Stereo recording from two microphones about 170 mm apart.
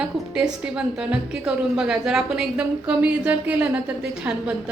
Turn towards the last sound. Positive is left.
turn(degrees=-10)  # may be behind; listen again after turning